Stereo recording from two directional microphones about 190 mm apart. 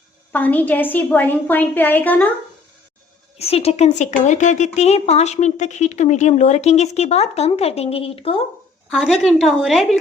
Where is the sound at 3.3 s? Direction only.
35° left (ahead or behind).